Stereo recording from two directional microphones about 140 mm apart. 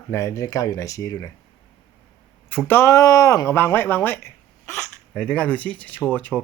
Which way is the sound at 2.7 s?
20° left (ahead or behind).